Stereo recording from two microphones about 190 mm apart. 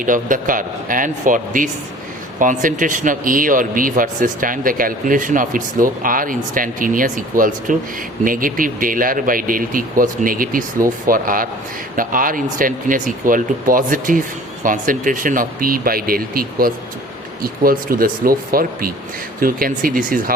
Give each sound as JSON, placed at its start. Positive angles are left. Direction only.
{"t": 0.0, "sound": "speech", "side_deg": -45}